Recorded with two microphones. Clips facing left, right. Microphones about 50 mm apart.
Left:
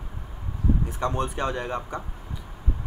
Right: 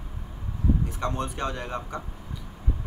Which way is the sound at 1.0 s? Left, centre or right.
Centre.